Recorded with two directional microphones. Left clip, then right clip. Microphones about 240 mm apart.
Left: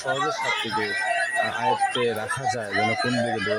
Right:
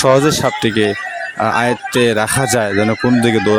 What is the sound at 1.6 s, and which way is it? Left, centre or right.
Speech, right.